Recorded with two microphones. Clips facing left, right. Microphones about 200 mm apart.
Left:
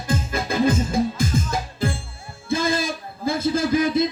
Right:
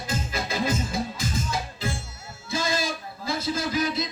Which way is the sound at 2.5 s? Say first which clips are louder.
Left 5 dB; 55° left (ahead or behind).